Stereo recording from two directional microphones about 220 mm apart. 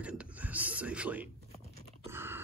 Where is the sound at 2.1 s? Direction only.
10° right (ahead or behind).